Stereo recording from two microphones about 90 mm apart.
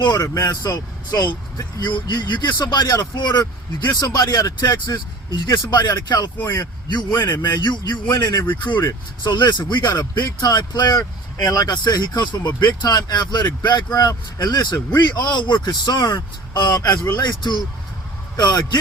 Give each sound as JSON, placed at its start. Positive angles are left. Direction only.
{"t": 0.0, "sound": "a man's voice", "side_deg": 45}
{"t": 7.4, "sound": "speech", "side_deg": 55}
{"t": 8.1, "sound": "a man's voice", "side_deg": 45}
{"t": 8.4, "sound": "a man's voice", "side_deg": 60}